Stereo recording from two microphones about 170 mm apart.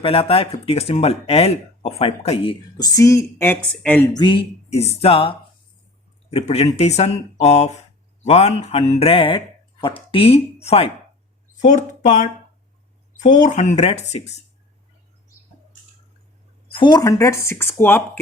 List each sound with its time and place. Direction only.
0.0 s speech: 35° left (ahead or behind); by 4.1 s 10° left (ahead or behind)
4.1 s speech: 25° left (ahead or behind)
6.3 s speech: 40° left (ahead or behind)
11.5 s speech: 50° left (ahead or behind)
16.7 s speech: 25° left (ahead or behind)